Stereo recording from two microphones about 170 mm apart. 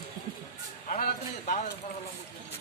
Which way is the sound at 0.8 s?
45° left (ahead or behind).